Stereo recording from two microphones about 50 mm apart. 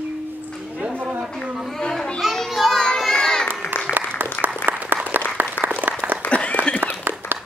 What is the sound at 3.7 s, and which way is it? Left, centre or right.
Applause, left.